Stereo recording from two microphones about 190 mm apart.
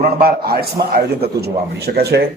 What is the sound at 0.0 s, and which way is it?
A man's voice, 55° right (ahead or behind).